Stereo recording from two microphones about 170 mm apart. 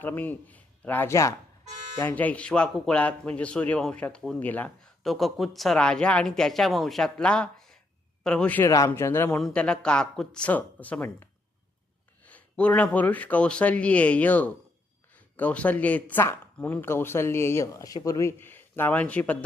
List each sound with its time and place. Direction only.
0.0 s a man's voice: 10° left (ahead or behind)